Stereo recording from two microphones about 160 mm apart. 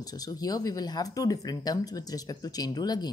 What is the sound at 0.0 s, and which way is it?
Speech, 25° left (ahead or behind).